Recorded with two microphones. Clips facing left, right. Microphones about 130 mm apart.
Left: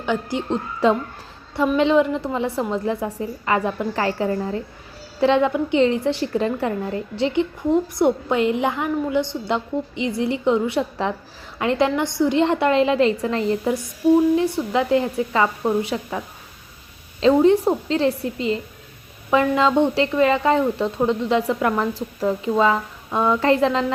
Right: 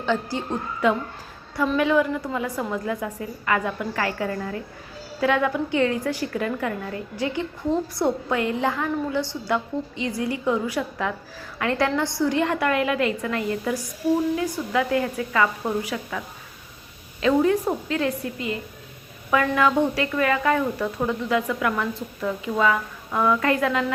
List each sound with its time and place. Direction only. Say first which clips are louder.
0.0 s a woman's voice: left 1 dB; 15° left (ahead or behind)
0.8 s a woman's voice: left 3 dB; 30° left (ahead or behind)